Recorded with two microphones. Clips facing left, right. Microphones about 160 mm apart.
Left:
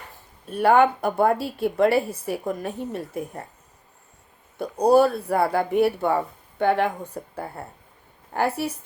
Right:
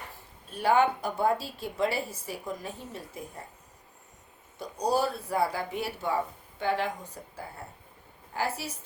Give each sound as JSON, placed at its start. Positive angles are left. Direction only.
{"t": 0.4, "sound": "speech", "side_deg": 60}
{"t": 4.5, "sound": "a woman's voice", "side_deg": 60}